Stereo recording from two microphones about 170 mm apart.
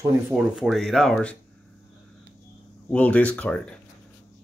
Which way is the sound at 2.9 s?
10° left (ahead or behind).